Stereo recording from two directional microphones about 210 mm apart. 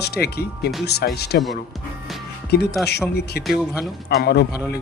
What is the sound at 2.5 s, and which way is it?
Speech, 50° left (ahead or behind).